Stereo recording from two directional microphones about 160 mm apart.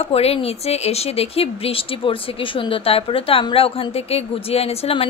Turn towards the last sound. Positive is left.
turn(degrees=40)  # may be behind; listen again after turning